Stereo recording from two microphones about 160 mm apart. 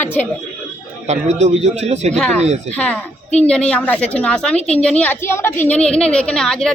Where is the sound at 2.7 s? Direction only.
10° left (ahead or behind).